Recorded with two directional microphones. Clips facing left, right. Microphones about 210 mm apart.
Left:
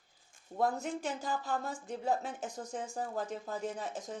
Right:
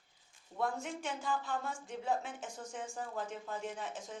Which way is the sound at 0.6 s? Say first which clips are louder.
Left 4 dB; 40° left (ahead or behind).